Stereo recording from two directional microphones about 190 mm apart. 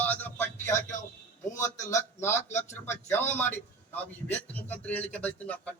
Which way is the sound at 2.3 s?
40° left (ahead or behind).